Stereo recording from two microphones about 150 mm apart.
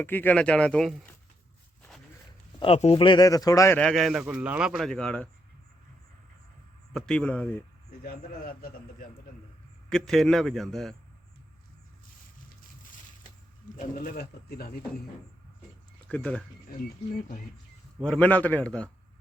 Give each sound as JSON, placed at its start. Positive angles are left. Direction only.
{"t": 0.0, "sound": "speech", "side_deg": 15}
{"t": 2.6, "sound": "speech", "side_deg": 40}
{"t": 3.8, "sound": "a man's voice", "side_deg": 5}
{"t": 4.9, "sound": "a man's voice", "side_deg": 5}
{"t": 6.9, "sound": "speech", "side_deg": 5}
{"t": 8.0, "sound": "a man's voice", "side_deg": 85}
{"t": 9.9, "sound": "a man's voice", "side_deg": 5}
{"t": 13.7, "sound": "speech", "side_deg": 70}
{"t": 16.0, "sound": "speech", "side_deg": 10}
{"t": 18.0, "sound": "speech", "side_deg": 5}